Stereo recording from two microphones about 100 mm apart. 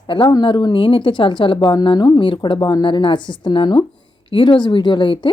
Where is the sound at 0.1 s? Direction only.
50° left (ahead or behind).